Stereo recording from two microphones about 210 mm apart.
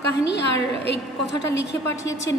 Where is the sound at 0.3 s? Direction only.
55° left (ahead or behind).